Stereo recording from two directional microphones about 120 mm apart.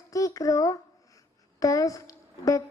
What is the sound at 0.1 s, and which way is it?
A woman's voice, 30° left (ahead or behind).